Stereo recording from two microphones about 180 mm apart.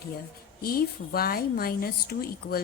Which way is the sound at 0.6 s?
55° left (ahead or behind).